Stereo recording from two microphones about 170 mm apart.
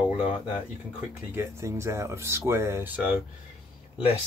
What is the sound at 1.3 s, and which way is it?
Speech, 15° right (ahead or behind).